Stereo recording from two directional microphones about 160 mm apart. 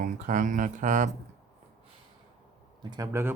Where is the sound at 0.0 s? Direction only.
55° right (ahead or behind).